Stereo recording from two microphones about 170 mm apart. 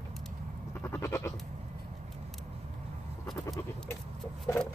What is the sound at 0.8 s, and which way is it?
Sheep, 15° left (ahead or behind).